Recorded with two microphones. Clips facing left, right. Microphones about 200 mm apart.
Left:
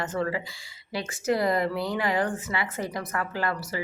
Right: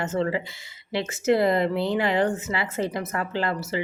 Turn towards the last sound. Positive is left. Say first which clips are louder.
# right 3 dB
turn(degrees=-25)  # may be behind; listen again after turning